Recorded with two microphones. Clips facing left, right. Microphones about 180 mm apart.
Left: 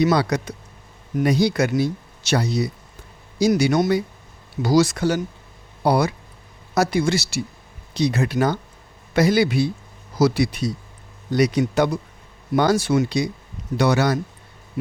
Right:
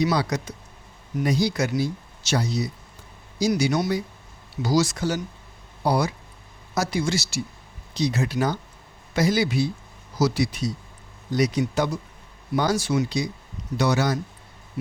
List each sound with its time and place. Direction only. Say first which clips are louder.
0.0 s a man's voice: left 4 dB; 60° left (ahead or behind)